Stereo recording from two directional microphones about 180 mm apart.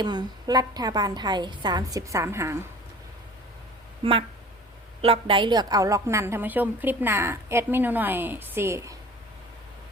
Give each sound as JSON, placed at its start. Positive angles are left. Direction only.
{"t": 0.0, "sound": "a woman's voice", "side_deg": -25}
{"t": 5.0, "sound": "a woman's voice", "side_deg": -30}